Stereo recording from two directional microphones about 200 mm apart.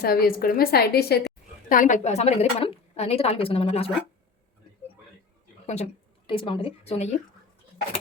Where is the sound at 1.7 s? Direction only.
40° left (ahead or behind).